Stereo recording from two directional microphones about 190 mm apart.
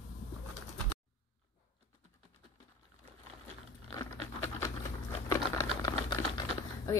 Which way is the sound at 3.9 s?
15° left (ahead or behind).